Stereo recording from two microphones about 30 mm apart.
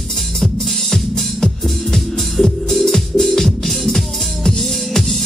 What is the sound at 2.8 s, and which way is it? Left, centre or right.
Music, centre.